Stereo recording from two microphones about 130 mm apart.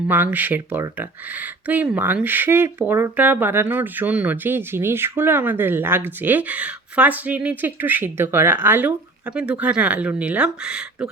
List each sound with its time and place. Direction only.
0.1 s speech: 15° right (ahead or behind)